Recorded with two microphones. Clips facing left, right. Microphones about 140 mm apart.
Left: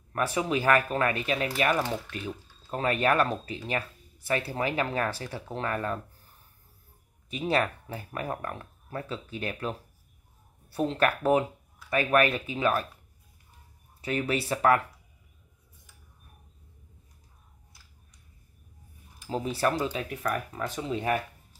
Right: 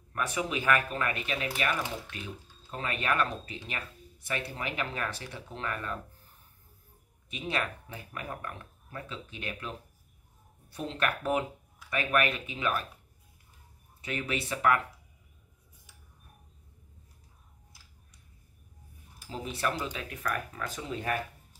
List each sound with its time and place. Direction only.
0.1 s speech: 30° left (ahead or behind)
7.2 s speech: 35° left (ahead or behind)
14.0 s speech: 35° left (ahead or behind)
19.2 s speech: 35° left (ahead or behind)